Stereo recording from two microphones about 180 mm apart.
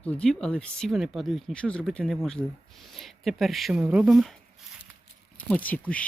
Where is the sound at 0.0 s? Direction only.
5° left (ahead or behind).